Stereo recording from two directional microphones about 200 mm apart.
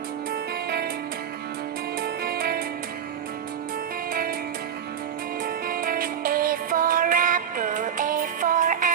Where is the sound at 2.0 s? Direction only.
50° right (ahead or behind).